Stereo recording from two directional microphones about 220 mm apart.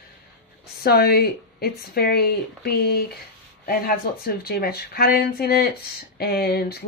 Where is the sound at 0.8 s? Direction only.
45° left (ahead or behind).